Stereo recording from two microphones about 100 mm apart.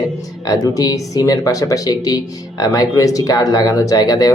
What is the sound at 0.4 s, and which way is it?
Speech, 40° left (ahead or behind).